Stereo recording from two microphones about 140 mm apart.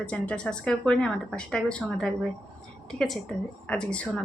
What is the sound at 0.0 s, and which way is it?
A woman's voice, 5° left (ahead or behind).